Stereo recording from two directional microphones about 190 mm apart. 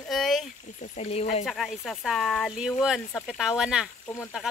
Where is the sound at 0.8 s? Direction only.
40° left (ahead or behind).